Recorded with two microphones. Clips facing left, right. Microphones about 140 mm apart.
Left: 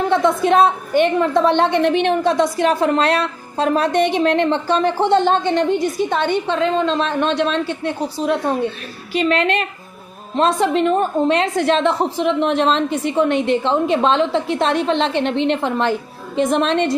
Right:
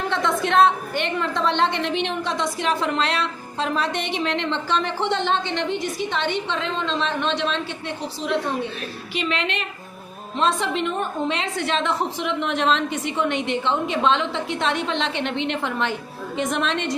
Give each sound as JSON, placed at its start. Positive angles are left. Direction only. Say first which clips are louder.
{"t": 0.1, "sound": "a woman's voice", "louder": "left 6 dB", "side_deg": 45}